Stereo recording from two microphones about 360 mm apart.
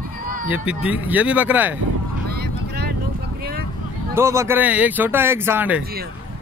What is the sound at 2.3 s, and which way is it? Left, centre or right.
Vehicle, right.